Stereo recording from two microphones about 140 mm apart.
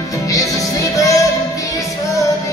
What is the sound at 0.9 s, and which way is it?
Music, 25° left (ahead or behind).